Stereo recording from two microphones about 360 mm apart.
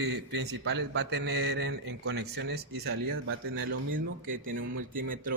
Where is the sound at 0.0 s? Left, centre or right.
Right.